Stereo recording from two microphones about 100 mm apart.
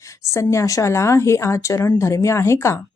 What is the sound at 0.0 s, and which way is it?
A woman's voice, 30° left (ahead or behind).